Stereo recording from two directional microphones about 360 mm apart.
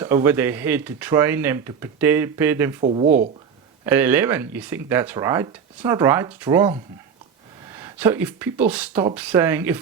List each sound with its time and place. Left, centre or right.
0.0 s speech: centre
2.8 s speech: centre
3.8 s speech: centre